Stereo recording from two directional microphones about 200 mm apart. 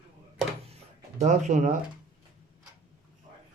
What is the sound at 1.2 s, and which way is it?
Speech, 35° right (ahead or behind).